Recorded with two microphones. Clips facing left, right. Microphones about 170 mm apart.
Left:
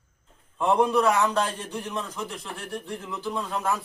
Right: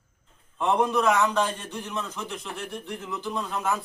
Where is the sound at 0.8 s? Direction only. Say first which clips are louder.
Left 1 dB; 10° left (ahead or behind).